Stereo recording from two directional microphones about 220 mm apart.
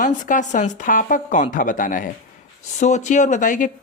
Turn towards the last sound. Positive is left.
turn(degrees=35)  # may be behind; listen again after turning